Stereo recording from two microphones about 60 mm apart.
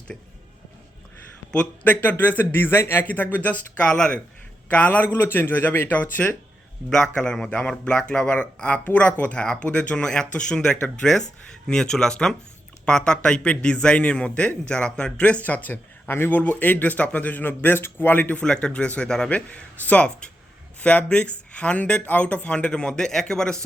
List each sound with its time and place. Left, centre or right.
1.5 s speech: left
3.9 s a man's voice: centre
4.7 s speech: left
5.1 s speech: left
6.9 s a man's voice: centre
19.3 s a man's voice: left